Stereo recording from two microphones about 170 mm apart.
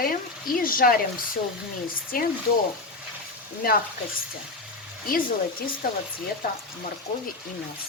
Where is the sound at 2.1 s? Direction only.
60° left (ahead or behind).